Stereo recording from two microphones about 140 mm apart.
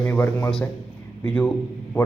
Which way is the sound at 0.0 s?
15° left (ahead or behind).